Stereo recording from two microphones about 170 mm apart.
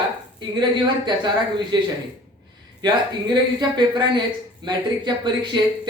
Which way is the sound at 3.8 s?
25° right (ahead or behind).